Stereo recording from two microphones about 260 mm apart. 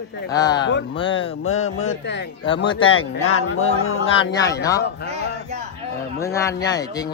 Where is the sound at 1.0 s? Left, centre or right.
Left.